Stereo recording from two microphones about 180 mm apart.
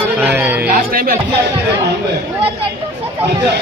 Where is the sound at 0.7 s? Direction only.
55° right (ahead or behind).